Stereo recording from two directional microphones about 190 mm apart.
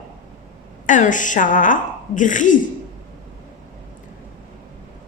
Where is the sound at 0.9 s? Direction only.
40° left (ahead or behind).